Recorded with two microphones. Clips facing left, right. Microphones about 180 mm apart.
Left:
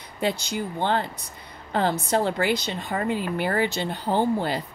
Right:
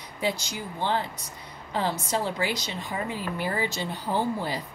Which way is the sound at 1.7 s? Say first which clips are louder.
Left 5 dB; 60° left (ahead or behind).